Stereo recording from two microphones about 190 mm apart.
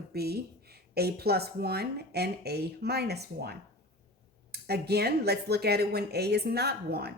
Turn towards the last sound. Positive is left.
turn(degrees=-55)  # may be behind; listen again after turning